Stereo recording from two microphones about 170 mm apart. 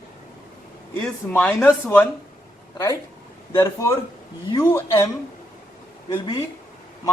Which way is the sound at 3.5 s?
20° left (ahead or behind).